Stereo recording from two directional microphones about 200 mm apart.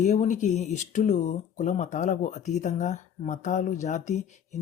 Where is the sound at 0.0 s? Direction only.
35° left (ahead or behind).